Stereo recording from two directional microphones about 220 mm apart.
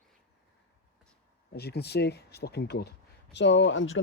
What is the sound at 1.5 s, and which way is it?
Speech, 45° left (ahead or behind).